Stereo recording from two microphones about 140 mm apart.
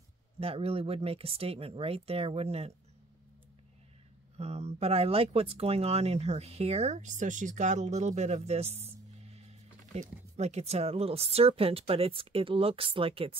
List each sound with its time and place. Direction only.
0.4 s speech: 45° right (ahead or behind)
4.4 s speech: 50° right (ahead or behind)